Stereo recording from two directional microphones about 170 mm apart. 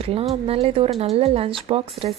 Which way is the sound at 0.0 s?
35° right (ahead or behind).